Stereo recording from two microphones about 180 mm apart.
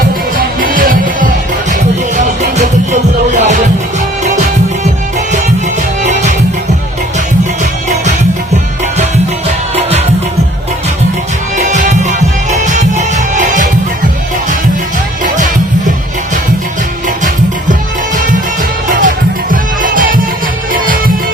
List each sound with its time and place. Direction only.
0.3 s music: 50° right (ahead or behind)
6.0 s music: 40° right (ahead or behind)
7.6 s music: 45° right (ahead or behind)
11.5 s music: 45° right (ahead or behind)
15.2 s music: 45° right (ahead or behind)
19.0 s music: 50° right (ahead or behind)